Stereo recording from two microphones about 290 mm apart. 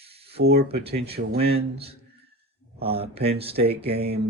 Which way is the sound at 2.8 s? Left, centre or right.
Centre.